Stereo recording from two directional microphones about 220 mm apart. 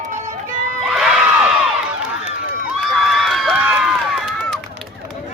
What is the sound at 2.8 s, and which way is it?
Run, centre (ahead or behind).